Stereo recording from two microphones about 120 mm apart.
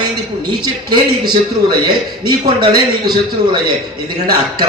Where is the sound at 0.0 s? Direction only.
35° right (ahead or behind).